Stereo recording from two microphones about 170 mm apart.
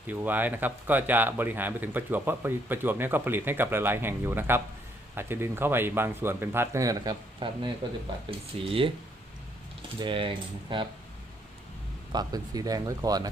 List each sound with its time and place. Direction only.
0.1 s speech: 10° right (ahead or behind); by 8.9 s 30° right (ahead or behind)
10.0 s speech: 30° right (ahead or behind)
12.1 s speech: 20° right (ahead or behind)